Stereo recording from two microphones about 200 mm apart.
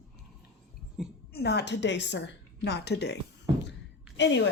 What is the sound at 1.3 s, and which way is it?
Speech, 55° left (ahead or behind).